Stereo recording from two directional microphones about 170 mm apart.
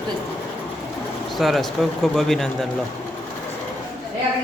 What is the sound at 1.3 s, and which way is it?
Speech, centre (ahead or behind).